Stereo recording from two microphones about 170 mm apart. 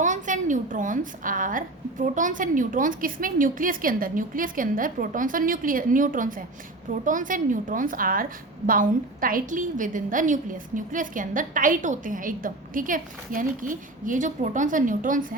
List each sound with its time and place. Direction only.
0.0 s a woman's voice: 45° right (ahead or behind)